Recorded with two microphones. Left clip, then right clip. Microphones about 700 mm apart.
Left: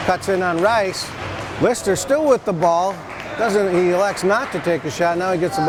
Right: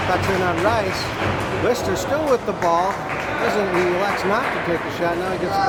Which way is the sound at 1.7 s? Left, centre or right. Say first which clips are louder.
Left 2 dB; left.